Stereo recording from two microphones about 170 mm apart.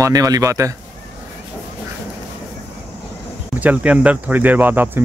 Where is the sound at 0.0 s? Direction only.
20° right (ahead or behind).